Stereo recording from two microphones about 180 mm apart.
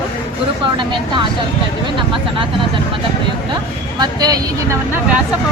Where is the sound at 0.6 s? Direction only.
25° right (ahead or behind).